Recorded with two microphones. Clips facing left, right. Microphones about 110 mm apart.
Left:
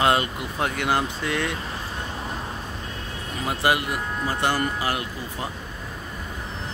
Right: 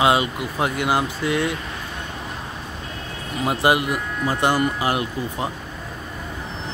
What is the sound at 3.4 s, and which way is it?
Speech, 20° right (ahead or behind).